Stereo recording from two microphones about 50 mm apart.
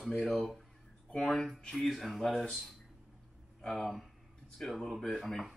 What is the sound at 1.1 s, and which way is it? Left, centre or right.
Speech, centre.